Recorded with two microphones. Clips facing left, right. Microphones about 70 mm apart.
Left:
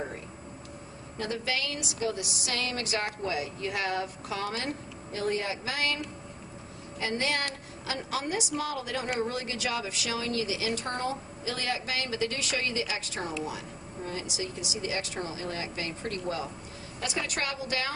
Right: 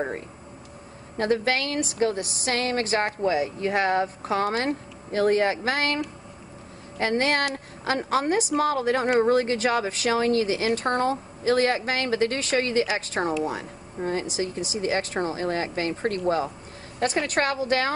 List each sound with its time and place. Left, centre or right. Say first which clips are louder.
1.1 s a woman's voice: right 9 dB; right